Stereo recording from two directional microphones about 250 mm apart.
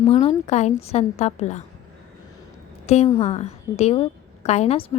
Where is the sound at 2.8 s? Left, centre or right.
Left.